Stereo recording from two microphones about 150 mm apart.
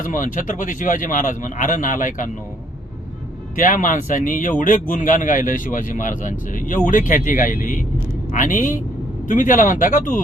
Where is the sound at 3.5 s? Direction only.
60° left (ahead or behind).